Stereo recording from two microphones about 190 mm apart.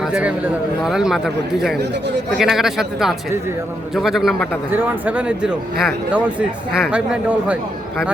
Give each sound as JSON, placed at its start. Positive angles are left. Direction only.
{"t": 0.0, "sound": "a man's voice", "side_deg": -5}
{"t": 1.8, "sound": "speech", "side_deg": -65}
{"t": 2.4, "sound": "a man's voice", "side_deg": 0}